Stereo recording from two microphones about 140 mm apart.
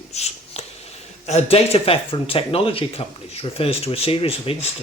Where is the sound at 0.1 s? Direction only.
50° left (ahead or behind).